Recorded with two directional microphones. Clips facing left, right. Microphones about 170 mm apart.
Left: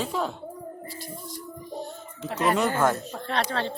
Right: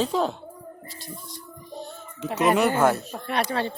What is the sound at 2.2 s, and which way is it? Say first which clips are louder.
A man's voice: right 3 dB; 15° right (ahead or behind).